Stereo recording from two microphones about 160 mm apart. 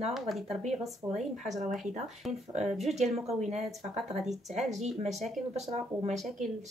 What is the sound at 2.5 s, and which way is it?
Speech, 40° right (ahead or behind).